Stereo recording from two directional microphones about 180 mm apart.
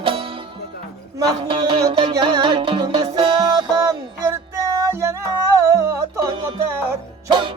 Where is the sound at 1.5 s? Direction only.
25° right (ahead or behind).